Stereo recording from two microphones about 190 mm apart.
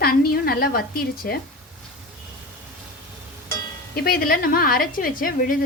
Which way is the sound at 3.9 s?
50° left (ahead or behind).